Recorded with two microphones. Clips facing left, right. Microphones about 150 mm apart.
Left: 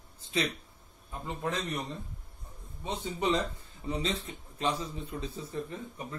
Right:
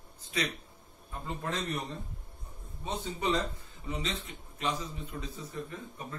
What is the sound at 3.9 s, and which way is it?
A man's voice, 35° left (ahead or behind).